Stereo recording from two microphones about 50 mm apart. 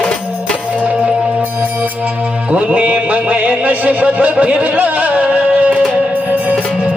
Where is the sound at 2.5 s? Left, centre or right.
Right.